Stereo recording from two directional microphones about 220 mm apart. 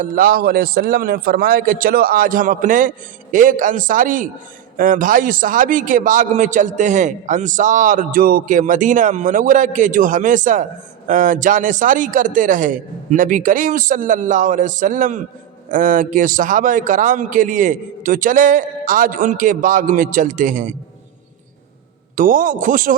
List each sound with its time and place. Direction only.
0.0 s a man's voice: 40° right (ahead or behind)
22.1 s a man's voice: 40° right (ahead or behind)